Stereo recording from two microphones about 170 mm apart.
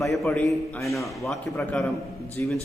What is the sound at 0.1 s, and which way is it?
A man's voice, 5° left (ahead or behind).